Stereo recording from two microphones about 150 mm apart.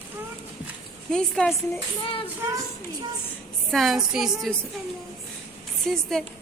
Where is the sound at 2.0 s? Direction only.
35° left (ahead or behind).